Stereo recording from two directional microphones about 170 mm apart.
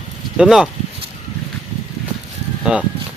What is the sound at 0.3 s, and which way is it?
Speech, 5° right (ahead or behind).